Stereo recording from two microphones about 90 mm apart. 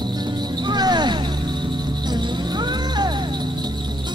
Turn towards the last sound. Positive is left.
turn(degrees=-50)  # may be behind; listen again after turning